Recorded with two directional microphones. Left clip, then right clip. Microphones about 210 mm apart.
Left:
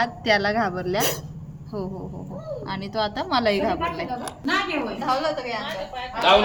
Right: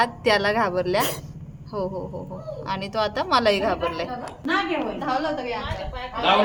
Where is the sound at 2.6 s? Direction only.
30° right (ahead or behind).